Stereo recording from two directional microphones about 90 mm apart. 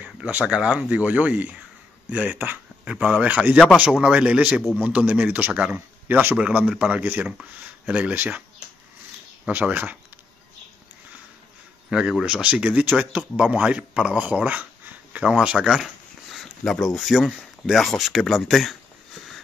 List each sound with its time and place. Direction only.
0.0 s speech: 15° right (ahead or behind)
3.8 s speech: 5° right (ahead or behind)
6.3 s speech: 10° right (ahead or behind)
9.5 s speech: 15° right (ahead or behind)
11.9 s speech: 5° right (ahead or behind)
15.2 s speech: 5° right (ahead or behind)